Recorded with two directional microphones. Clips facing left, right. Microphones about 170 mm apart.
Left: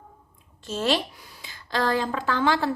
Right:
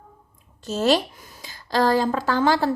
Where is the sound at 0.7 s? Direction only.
40° right (ahead or behind).